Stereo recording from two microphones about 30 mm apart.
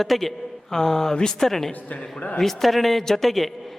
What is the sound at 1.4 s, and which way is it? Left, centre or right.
A man's voice, centre.